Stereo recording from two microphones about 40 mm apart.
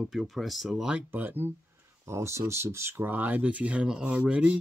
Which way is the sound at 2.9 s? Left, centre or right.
Right.